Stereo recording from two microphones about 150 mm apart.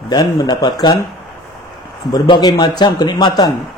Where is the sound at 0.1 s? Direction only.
25° left (ahead or behind).